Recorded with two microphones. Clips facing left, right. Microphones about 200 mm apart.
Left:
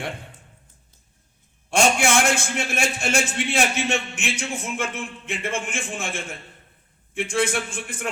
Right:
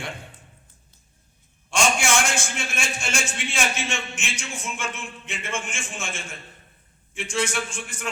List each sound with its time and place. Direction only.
1.7 s a man's voice: 60° left (ahead or behind)